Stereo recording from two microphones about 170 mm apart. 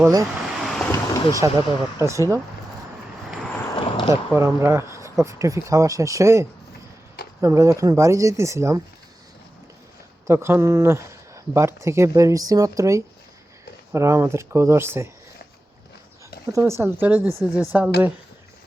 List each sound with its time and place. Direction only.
0.0 s speech: 20° right (ahead or behind)
0.4 s vehicle: centre (ahead or behind)
1.3 s speech: 20° right (ahead or behind)
3.8 s a sound: 30° left (ahead or behind)
4.1 s speech: 15° right (ahead or behind)
10.2 s speech: 15° right (ahead or behind)
16.5 s speech: 15° right (ahead or behind)